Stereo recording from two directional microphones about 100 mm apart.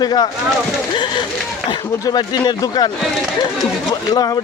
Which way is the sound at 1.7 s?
45° left (ahead or behind).